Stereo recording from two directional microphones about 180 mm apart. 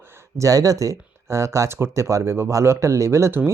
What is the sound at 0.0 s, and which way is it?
Speech, 15° right (ahead or behind).